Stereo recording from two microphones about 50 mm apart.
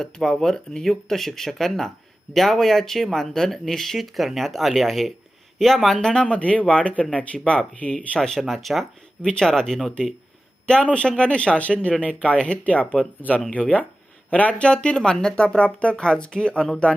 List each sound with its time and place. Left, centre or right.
0.0 s speech: centre
6.0 s speech: centre
6.2 s speech: left
7.9 s speech: centre
10.7 s speech: left
14.6 s speech: centre